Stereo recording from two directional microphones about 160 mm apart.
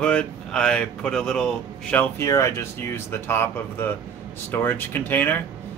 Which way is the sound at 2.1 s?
20° left (ahead or behind).